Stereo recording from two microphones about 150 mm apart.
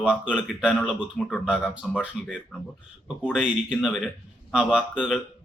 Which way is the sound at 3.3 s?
5° right (ahead or behind).